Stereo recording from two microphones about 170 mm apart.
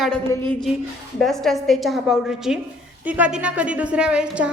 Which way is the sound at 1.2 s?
Centre (ahead or behind).